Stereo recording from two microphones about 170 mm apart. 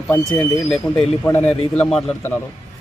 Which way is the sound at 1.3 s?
15° left (ahead or behind).